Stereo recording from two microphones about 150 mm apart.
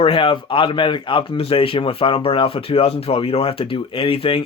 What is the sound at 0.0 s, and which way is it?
Speech, 35° left (ahead or behind).